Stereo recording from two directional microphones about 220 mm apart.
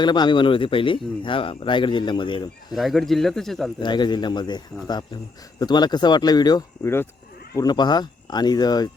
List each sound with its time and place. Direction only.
0.0 s speech: 20° left (ahead or behind)
2.7 s speech: centre (ahead or behind)
3.8 s speech: 20° left (ahead or behind)